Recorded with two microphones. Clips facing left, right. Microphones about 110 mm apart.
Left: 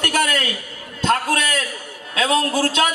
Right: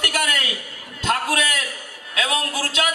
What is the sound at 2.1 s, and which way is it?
Speech, 35° left (ahead or behind).